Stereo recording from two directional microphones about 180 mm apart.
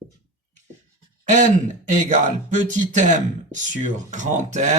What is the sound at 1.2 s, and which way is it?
A man's voice, 45° right (ahead or behind).